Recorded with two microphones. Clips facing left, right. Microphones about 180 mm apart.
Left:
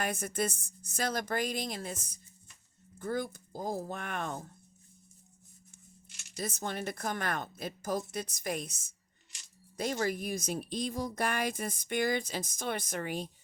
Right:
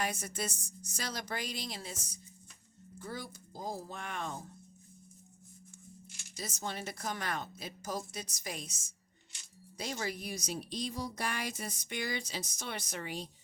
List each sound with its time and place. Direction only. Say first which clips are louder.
0.0 s a woman's voice: left 4 dB; 55° left (ahead or behind)
3.0 s speech: left 9 dB; 50° left (ahead or behind)
6.3 s a woman's voice: left 4 dB; 55° left (ahead or behind)